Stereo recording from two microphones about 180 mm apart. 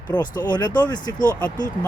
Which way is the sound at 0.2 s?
25° left (ahead or behind).